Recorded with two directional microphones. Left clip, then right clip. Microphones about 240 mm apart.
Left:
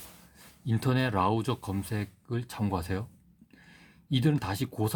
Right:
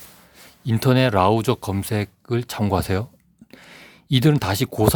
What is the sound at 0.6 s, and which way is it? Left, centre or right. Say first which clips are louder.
Speech: right 11 dB; right.